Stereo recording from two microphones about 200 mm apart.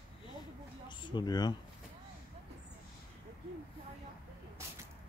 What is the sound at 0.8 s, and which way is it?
Speech, 20° left (ahead or behind).